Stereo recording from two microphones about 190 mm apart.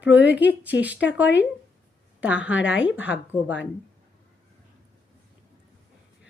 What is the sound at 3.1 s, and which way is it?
Speech, 80° left.